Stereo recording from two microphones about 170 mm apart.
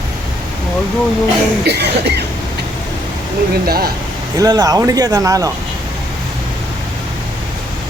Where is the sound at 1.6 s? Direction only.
75° right (ahead or behind).